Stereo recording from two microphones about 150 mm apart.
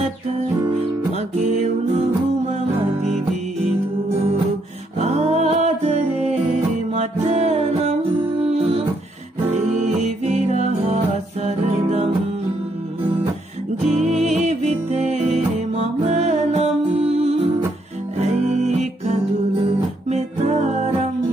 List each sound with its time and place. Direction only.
1.1 s music: 45° right (ahead or behind)
4.9 s music: 45° right (ahead or behind)
6.9 s music: 45° right (ahead or behind)
13.9 s music: 50° right (ahead or behind)